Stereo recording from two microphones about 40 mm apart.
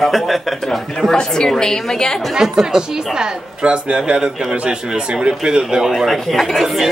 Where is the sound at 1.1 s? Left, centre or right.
Centre.